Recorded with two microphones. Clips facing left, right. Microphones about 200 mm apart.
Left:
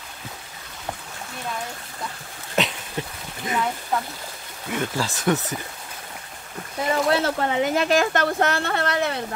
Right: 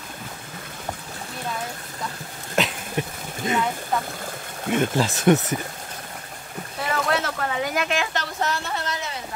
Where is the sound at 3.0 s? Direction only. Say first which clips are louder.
Right 3 dB; 15° right (ahead or behind).